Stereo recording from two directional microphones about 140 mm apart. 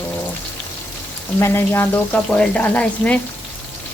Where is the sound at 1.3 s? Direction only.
20° left (ahead or behind).